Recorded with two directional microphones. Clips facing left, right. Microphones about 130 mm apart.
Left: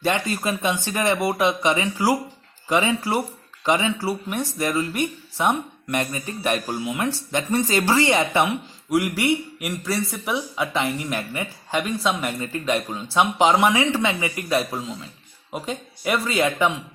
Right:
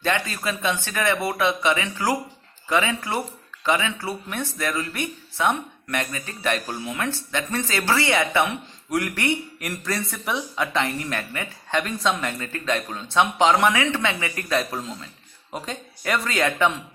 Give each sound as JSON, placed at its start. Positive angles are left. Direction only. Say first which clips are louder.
{"t": 0.0, "sound": "speech", "louder": "left 2 dB", "side_deg": 20}